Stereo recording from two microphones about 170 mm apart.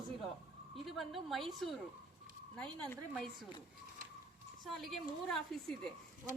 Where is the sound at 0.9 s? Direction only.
Centre (ahead or behind).